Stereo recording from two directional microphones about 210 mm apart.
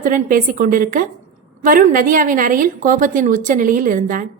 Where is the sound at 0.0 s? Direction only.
40° right (ahead or behind).